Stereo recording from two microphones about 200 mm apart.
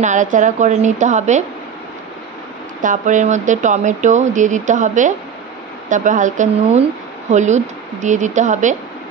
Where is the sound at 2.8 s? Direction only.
40° right (ahead or behind).